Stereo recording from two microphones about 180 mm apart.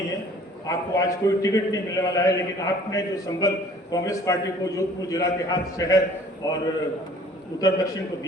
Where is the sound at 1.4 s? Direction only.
20° left (ahead or behind).